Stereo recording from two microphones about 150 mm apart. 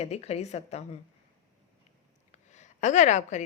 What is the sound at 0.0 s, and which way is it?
Speech, 45° left (ahead or behind).